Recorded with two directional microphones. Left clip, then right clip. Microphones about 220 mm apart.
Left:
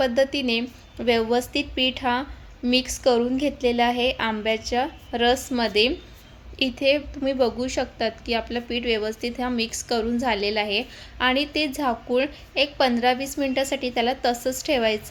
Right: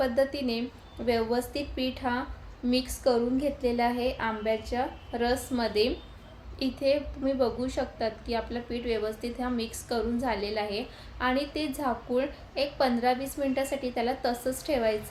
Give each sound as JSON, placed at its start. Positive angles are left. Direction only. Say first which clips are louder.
{"t": 0.0, "sound": "a woman's voice", "louder": "left 5 dB", "side_deg": 40}